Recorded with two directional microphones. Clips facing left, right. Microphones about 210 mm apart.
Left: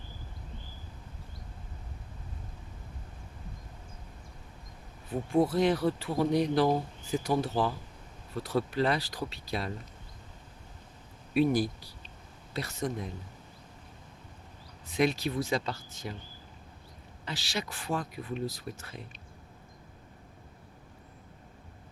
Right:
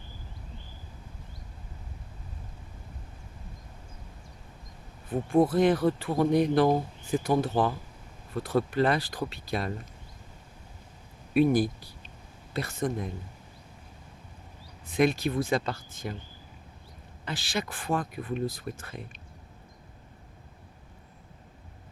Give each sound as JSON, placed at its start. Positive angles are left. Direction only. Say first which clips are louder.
{"t": 5.3, "sound": "speech", "louder": "right 3 dB", "side_deg": -50}
{"t": 11.3, "sound": "speech", "louder": "right 3 dB", "side_deg": -50}
{"t": 14.8, "sound": "speech", "louder": "right 3 dB", "side_deg": -50}
{"t": 17.2, "sound": "speech", "louder": "right 3 dB", "side_deg": -50}